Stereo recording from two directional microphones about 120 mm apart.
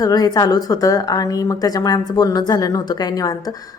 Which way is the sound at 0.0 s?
30° left (ahead or behind).